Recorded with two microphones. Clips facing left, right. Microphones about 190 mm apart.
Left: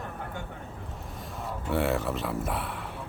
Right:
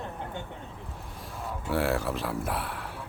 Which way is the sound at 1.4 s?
Centre (ahead or behind).